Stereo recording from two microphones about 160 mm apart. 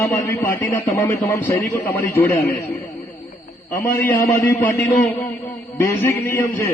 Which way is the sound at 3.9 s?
15° left (ahead or behind).